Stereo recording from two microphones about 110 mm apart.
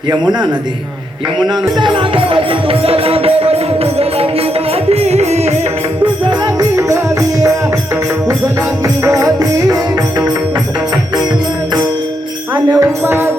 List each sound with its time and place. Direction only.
1.8 s music: 50° right (ahead or behind); by 5.5 s 80° right
6.2 s music: 35° right (ahead or behind)
8.8 s music: 30° right (ahead or behind)
12.7 s music: 20° right (ahead or behind)